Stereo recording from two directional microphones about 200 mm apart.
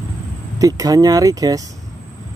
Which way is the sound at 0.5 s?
20° right (ahead or behind).